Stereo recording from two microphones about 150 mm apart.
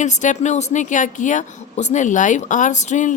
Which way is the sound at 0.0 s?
55° left (ahead or behind).